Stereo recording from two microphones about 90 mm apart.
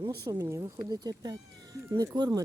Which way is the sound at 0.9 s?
45° right (ahead or behind).